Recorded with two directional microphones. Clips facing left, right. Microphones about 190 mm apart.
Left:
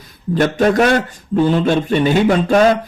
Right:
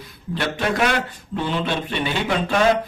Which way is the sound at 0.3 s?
45° left (ahead or behind).